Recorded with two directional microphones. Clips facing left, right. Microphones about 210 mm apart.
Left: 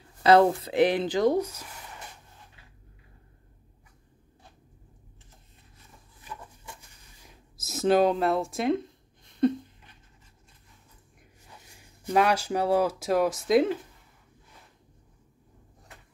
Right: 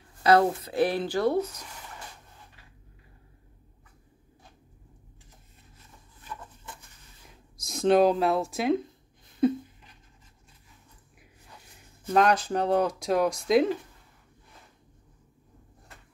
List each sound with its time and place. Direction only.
0.2 s speech: 25° left (ahead or behind); by 1.7 s 10° left (ahead or behind)
7.2 s a sound: 5° left (ahead or behind)
12.0 s speech: 10° left (ahead or behind)